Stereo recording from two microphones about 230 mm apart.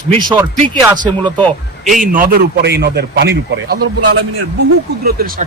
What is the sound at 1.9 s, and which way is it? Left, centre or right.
A man's voice, right.